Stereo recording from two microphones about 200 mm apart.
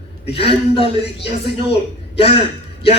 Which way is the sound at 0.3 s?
25° left (ahead or behind).